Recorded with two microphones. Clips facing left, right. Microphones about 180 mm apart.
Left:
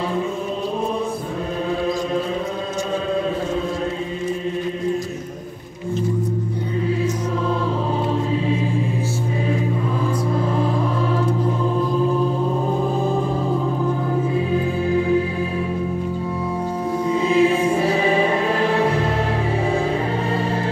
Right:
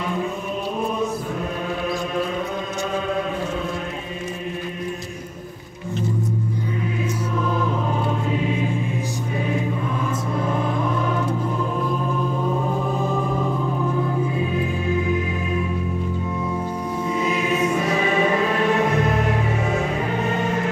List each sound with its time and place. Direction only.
8.3 s choir: 30° left (ahead or behind)
10.4 s music: 30° left (ahead or behind)
14.5 s music: 30° left (ahead or behind)
17.1 s music: 30° left (ahead or behind)